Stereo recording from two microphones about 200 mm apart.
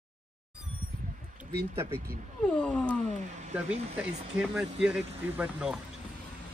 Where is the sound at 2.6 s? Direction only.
5° left (ahead or behind).